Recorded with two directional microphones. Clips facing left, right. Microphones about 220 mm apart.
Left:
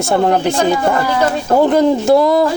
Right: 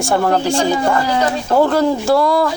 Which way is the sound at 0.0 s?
20° left (ahead or behind).